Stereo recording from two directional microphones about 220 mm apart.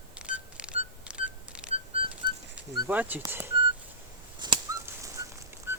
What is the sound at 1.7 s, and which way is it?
Whistling, 25° right (ahead or behind).